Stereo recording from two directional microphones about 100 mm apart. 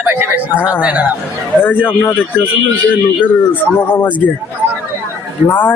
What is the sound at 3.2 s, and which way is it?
Speech, 15° left (ahead or behind).